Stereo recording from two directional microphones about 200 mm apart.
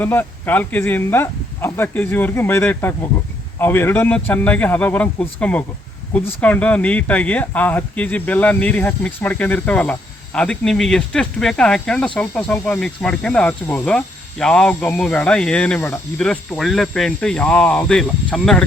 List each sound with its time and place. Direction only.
0.0 s speech: 10° left (ahead or behind)